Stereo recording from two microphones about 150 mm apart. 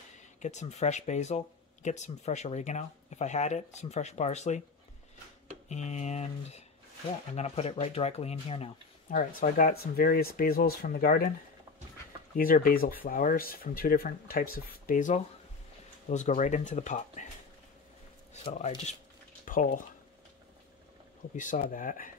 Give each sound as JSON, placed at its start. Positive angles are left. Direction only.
{"t": 0.4, "sound": "speech", "side_deg": 50}
{"t": 5.7, "sound": "speech", "side_deg": 50}
{"t": 9.1, "sound": "speech", "side_deg": 60}
{"t": 12.4, "sound": "speech", "side_deg": 70}
{"t": 18.3, "sound": "speech", "side_deg": 45}
{"t": 19.4, "sound": "speech", "side_deg": 65}
{"t": 21.4, "sound": "speech", "side_deg": 60}